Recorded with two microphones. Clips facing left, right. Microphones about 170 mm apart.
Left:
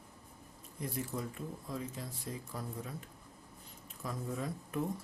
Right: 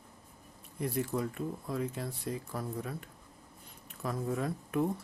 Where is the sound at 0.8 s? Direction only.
65° right (ahead or behind).